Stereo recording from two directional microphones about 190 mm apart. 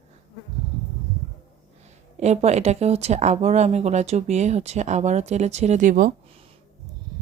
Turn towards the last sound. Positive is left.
turn(degrees=-45)  # may be behind; listen again after turning